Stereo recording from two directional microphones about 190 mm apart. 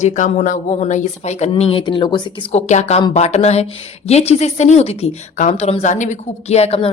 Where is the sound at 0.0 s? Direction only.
40° left (ahead or behind).